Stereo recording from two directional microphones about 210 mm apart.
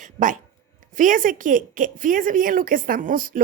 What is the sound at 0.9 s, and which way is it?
A woman's voice, 40° right (ahead or behind).